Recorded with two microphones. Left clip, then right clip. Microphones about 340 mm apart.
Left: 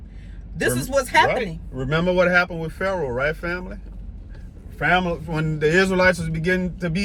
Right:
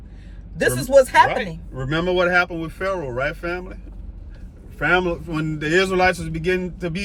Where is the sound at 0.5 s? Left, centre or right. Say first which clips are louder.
Right 7 dB; centre.